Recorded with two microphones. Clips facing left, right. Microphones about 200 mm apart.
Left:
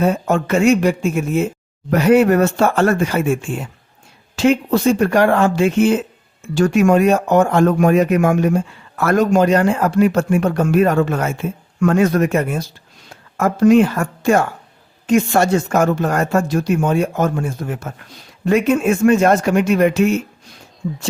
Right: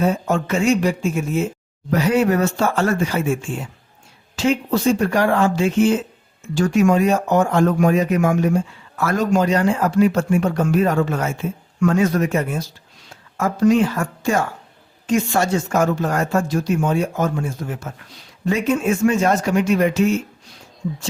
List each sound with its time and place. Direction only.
0.0 s a woman's voice: 60° left (ahead or behind)